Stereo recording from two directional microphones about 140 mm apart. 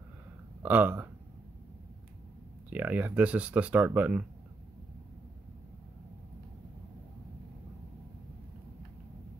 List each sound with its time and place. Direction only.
0.6 s speech: 10° right (ahead or behind)
2.7 s speech: 10° right (ahead or behind)